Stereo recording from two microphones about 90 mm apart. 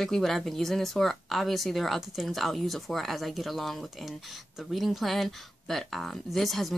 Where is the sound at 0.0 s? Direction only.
5° left (ahead or behind).